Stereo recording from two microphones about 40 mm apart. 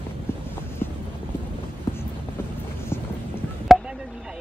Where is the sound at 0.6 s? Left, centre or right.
Left.